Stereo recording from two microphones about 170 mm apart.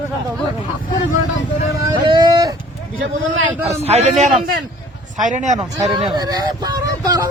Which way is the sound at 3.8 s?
40° right (ahead or behind).